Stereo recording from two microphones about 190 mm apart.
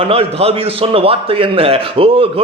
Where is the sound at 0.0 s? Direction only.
30° right (ahead or behind).